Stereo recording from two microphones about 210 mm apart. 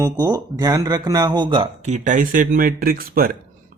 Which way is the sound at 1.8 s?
35° right (ahead or behind).